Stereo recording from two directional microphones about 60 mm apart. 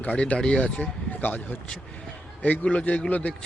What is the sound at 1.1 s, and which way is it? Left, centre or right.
Speech, left.